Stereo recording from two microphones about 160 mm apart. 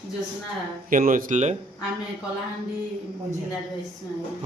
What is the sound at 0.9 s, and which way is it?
Speech, 60° right (ahead or behind).